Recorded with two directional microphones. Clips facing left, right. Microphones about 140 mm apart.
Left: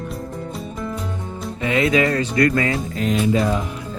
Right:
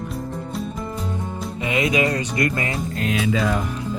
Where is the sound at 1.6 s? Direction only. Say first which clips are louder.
Left 3 dB; 15° right (ahead or behind).